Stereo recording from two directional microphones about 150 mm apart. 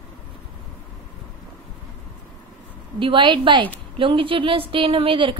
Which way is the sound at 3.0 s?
35° right (ahead or behind).